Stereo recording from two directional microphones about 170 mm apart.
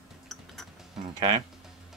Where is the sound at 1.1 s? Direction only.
30° right (ahead or behind).